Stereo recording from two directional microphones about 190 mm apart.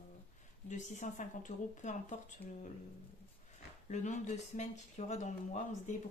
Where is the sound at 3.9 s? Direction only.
40° left (ahead or behind).